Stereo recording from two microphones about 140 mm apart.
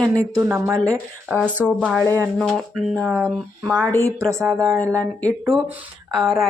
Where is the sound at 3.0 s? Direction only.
15° right (ahead or behind).